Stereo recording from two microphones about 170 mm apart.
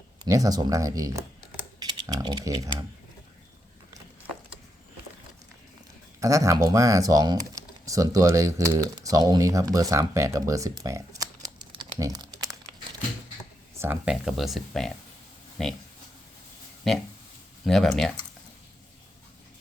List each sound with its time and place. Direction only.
0.3 s speech: 20° right (ahead or behind)
6.1 s speech: 20° right (ahead or behind)
13.7 s speech: 15° right (ahead or behind); by 15.7 s centre (ahead or behind)
16.9 s speech: centre (ahead or behind)